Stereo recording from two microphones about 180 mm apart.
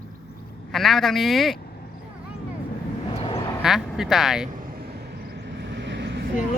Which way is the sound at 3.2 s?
25° left (ahead or behind).